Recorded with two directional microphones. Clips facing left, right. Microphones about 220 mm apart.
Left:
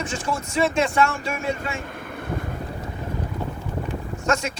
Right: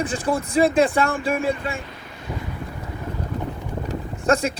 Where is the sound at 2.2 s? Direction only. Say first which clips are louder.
Left 2 dB; 55° left (ahead or behind).